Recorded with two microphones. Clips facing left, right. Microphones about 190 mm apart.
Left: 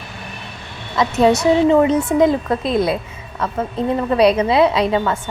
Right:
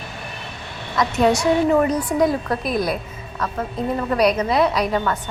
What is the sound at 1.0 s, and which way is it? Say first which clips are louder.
A woman's voice: left 3 dB; 25° left (ahead or behind).